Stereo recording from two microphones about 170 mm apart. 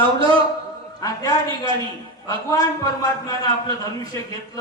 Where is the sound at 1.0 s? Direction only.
20° left (ahead or behind).